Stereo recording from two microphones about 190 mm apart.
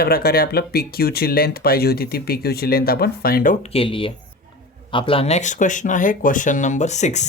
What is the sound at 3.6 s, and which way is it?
Speech, 30° left (ahead or behind).